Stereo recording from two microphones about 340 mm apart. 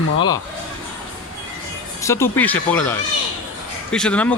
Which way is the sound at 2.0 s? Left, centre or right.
Centre.